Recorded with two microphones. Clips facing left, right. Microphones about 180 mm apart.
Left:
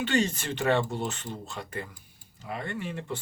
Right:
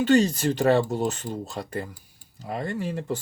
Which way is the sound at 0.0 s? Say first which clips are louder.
Right 7 dB; 40° right (ahead or behind).